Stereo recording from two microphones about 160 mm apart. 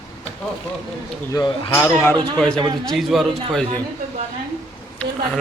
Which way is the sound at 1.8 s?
10° left (ahead or behind).